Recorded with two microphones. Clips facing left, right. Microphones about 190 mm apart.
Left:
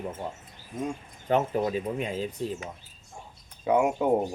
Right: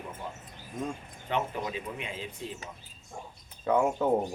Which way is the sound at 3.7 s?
15° left (ahead or behind).